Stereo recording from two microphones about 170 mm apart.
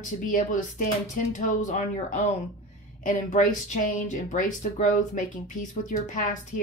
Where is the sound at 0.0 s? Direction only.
50° left (ahead or behind).